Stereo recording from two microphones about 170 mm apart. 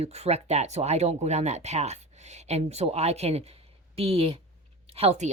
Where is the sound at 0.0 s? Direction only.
40° right (ahead or behind).